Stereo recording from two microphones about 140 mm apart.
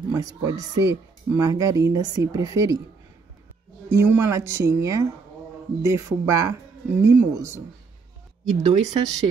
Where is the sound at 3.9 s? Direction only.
20° right (ahead or behind).